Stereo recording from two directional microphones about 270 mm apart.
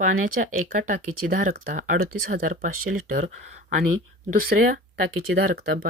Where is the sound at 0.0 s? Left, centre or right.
Right.